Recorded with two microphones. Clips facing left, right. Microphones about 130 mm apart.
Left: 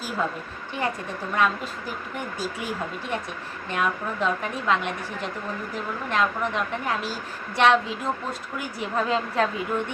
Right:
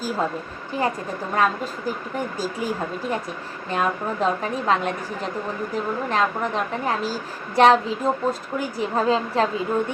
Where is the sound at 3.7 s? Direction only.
35° right (ahead or behind).